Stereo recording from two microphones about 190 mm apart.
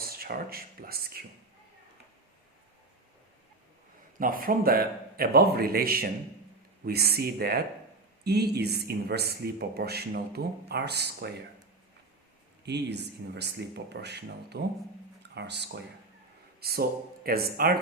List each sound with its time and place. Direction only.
0.2 s a man's voice: 50° right (ahead or behind)
4.2 s a man's voice: 45° right (ahead or behind)
12.6 s a man's voice: 60° right (ahead or behind)